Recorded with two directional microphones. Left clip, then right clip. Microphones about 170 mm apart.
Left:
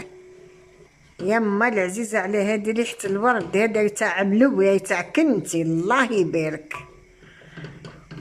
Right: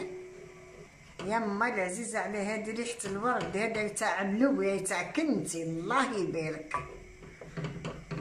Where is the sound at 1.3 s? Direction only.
60° left (ahead or behind).